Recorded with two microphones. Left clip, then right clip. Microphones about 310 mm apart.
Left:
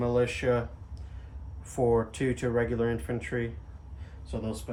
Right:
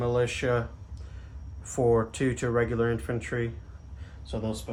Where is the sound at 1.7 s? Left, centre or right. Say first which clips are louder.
Right 2 dB; right.